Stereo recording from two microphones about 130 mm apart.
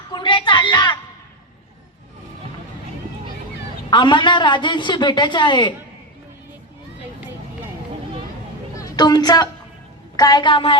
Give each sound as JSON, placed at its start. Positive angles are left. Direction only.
{"t": 0.1, "sound": "a sound", "side_deg": 35}
{"t": 3.8, "sound": "a woman's voice", "side_deg": 35}
{"t": 8.8, "sound": "a woman's voice", "side_deg": 30}